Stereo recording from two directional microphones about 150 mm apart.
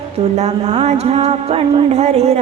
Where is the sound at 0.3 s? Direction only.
45° right (ahead or behind).